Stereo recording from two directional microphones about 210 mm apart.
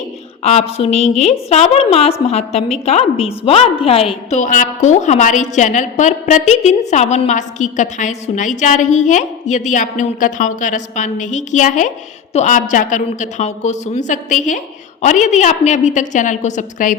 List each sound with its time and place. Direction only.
0.4 s a woman's voice: 30° left (ahead or behind)